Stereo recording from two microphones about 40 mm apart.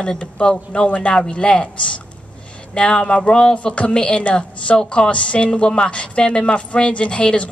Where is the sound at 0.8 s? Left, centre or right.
Left.